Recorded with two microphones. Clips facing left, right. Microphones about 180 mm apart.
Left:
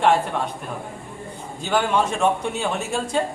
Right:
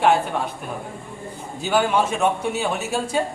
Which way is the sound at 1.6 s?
5° right (ahead or behind).